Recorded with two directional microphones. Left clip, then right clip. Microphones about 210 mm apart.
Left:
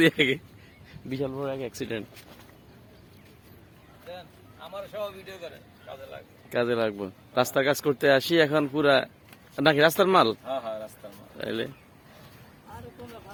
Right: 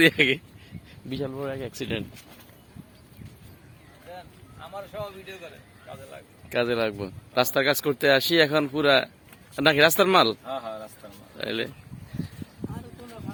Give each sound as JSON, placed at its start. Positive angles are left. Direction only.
{"t": 0.0, "sound": "speech", "side_deg": -10}
{"t": 4.7, "sound": "speech", "side_deg": 20}
{"t": 6.5, "sound": "speech", "side_deg": 0}
{"t": 10.4, "sound": "speech", "side_deg": 15}
{"t": 11.3, "sound": "speech", "side_deg": -5}